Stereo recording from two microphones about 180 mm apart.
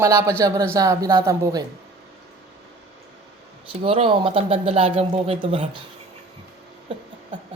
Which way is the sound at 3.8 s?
30° right (ahead or behind).